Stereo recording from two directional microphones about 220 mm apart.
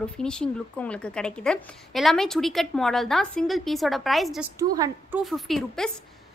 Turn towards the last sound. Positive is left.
turn(degrees=0)  # may be behind; listen again after turning